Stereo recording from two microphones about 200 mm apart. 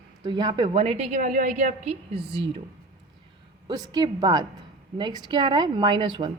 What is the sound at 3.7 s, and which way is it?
A woman's voice, 20° right (ahead or behind).